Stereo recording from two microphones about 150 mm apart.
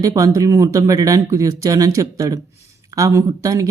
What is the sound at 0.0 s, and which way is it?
Speech, 25° right (ahead or behind).